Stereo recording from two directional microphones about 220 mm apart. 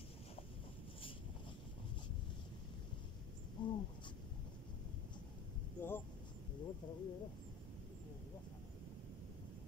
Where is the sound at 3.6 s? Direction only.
20° left (ahead or behind).